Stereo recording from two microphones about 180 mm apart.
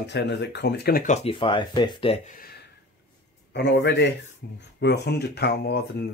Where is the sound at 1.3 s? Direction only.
25° left (ahead or behind).